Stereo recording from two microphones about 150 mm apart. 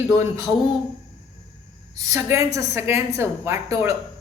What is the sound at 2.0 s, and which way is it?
A man's voice, 20° right (ahead or behind).